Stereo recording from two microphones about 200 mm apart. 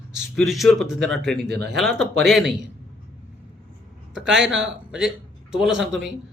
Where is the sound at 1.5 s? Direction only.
55° right (ahead or behind).